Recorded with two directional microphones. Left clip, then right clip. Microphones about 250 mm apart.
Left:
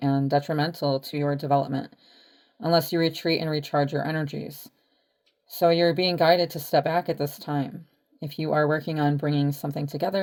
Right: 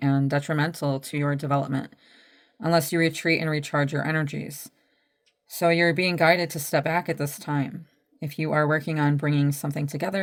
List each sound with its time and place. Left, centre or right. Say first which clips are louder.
0.0 s speech: left 2 dB; right